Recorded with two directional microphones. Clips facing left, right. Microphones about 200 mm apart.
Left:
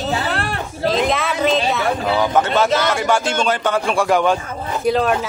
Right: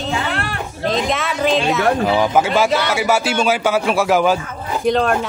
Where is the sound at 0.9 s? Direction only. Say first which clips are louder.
Left 1 dB; centre (ahead or behind).